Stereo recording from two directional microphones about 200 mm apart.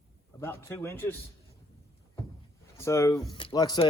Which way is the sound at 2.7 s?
15° left (ahead or behind).